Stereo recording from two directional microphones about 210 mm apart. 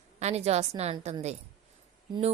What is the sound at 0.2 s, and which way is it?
Speech, 30° right (ahead or behind).